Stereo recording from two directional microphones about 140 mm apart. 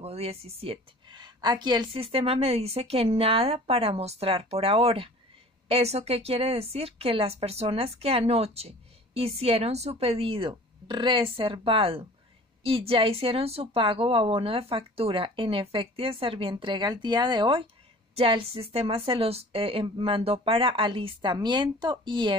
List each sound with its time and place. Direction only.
0.0 s a woman's voice: 45° right (ahead or behind)